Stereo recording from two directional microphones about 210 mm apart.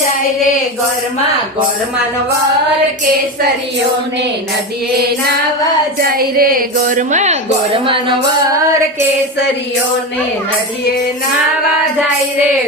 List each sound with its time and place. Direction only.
6.0 s a woman's voice: 45° right (ahead or behind); by 8.1 s 25° right (ahead or behind)